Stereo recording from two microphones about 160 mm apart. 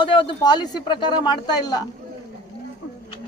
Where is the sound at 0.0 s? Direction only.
30° left (ahead or behind).